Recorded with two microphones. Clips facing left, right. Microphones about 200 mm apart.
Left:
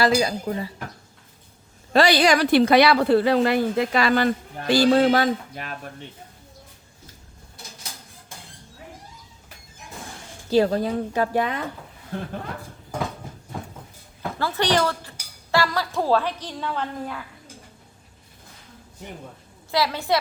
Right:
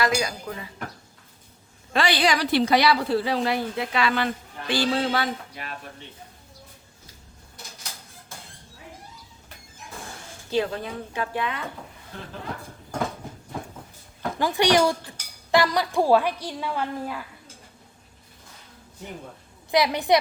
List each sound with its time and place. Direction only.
0.0 s a woman's voice: 30° left (ahead or behind)
1.9 s speech: 40° left (ahead or behind)
10.5 s a woman's voice: 40° left (ahead or behind)
14.3 s a woman's voice: 15° right (ahead or behind)
19.7 s a woman's voice: 20° right (ahead or behind)